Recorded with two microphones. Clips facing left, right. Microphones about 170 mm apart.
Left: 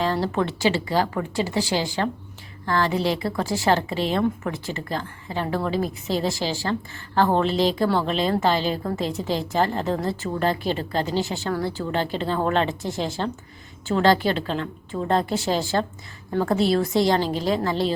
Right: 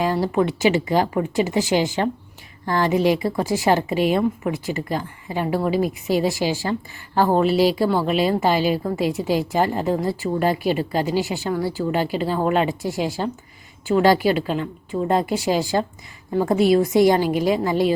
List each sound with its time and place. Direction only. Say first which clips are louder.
0.0 s a woman's voice: right 3 dB; 10° right (ahead or behind)